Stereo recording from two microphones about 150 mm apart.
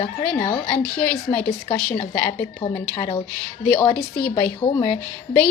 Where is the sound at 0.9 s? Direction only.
10° left (ahead or behind).